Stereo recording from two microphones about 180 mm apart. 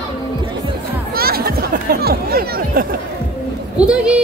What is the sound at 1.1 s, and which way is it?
Chatter, 55° right (ahead or behind).